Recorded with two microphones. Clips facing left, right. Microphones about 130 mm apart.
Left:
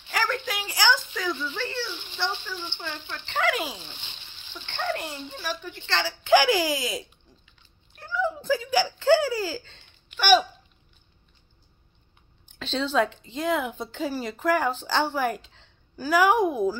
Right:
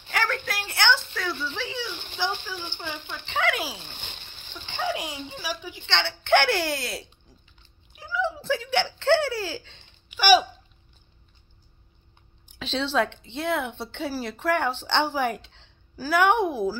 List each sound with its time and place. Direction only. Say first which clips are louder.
0.1 s a woman's voice: even; centre (ahead or behind)
7.9 s giggle: even; 5° right (ahead or behind)
12.4 s a woman's voice: even; 5° right (ahead or behind)